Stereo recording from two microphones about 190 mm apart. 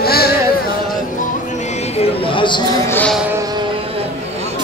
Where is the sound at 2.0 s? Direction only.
25° left (ahead or behind).